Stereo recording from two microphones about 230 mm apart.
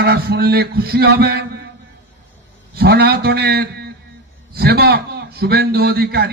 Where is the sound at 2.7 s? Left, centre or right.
Right.